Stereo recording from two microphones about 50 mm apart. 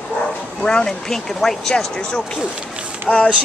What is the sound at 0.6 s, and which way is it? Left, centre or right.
Speech, centre.